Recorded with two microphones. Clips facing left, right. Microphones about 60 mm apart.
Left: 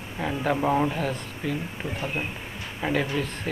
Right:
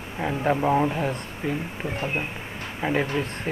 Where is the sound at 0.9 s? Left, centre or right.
Right.